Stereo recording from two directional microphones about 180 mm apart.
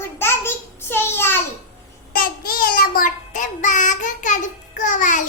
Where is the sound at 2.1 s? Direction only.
55° left (ahead or behind).